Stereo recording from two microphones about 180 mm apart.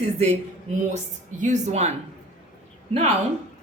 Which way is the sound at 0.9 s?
40° right (ahead or behind).